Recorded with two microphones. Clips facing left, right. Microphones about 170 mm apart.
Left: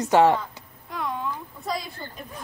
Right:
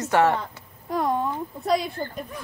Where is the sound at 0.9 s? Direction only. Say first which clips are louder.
Right 6 dB; 45° right (ahead or behind).